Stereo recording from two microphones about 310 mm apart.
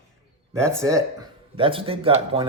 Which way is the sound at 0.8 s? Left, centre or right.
Centre.